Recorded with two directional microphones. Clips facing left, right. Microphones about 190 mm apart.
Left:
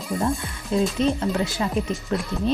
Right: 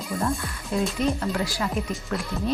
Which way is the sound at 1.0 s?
25° left (ahead or behind).